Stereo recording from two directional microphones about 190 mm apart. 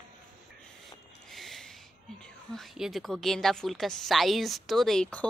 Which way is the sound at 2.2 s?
Centre (ahead or behind).